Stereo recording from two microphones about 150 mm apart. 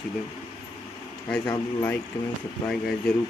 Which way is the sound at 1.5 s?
20° left (ahead or behind).